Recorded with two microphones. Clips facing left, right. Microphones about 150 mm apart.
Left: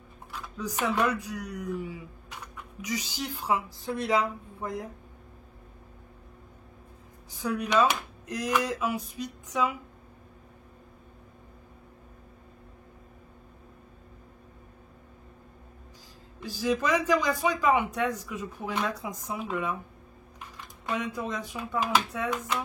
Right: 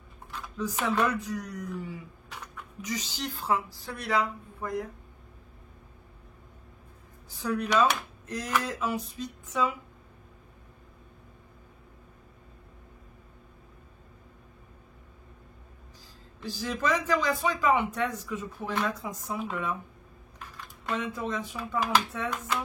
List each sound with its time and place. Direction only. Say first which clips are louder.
0.3 s speech: right 2 dB; 10° left (ahead or behind)
7.4 s speech: even; 10° left (ahead or behind)
16.3 s speech: left 5 dB; 15° left (ahead or behind)
20.3 s a sound: right 1 dB; 15° left (ahead or behind)